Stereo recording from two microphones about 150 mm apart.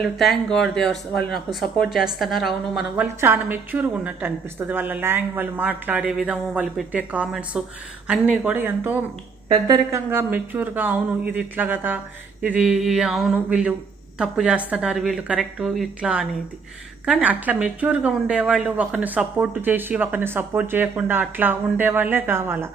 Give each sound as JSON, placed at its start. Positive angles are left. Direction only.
{"t": 0.0, "sound": "speech", "side_deg": 0}
{"t": 3.2, "sound": "a woman's voice", "side_deg": -15}